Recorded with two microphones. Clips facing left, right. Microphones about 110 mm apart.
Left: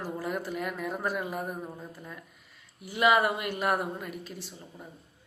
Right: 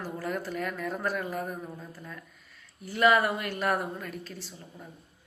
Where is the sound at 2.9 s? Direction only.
10° left (ahead or behind).